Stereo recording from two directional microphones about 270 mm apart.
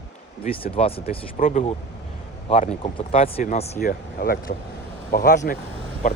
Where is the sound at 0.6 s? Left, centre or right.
Left.